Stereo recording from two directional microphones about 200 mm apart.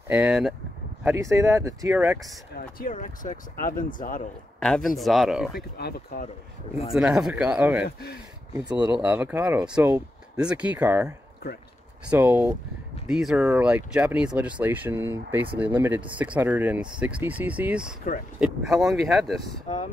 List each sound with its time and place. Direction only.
0.1 s speech: 5° right (ahead or behind)
1.1 s speech: 15° right (ahead or behind)
1.9 s speech: 5° right (ahead or behind)
2.8 s speech: 40° left (ahead or behind)
4.6 s speech: 5° left (ahead or behind)
5.8 s speech: 55° left (ahead or behind)
6.9 s speech: 5° right (ahead or behind)
8.9 s speech: 10° right (ahead or behind)